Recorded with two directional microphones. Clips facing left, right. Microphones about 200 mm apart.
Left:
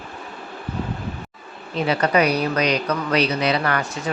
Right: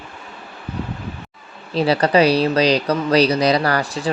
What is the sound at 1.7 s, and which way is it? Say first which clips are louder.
Speech: right 4 dB; 35° right (ahead or behind).